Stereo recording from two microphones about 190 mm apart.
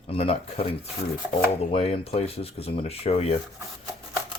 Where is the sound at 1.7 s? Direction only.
30° left (ahead or behind).